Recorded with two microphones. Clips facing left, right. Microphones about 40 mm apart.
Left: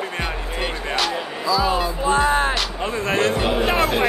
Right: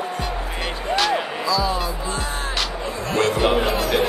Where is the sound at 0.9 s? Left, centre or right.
Centre.